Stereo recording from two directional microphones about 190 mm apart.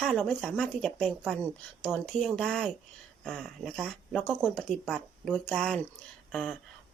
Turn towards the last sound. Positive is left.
turn(degrees=0)  # may be behind; listen again after turning